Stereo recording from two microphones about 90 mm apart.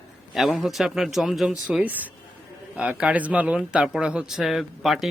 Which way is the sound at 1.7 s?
15° right (ahead or behind).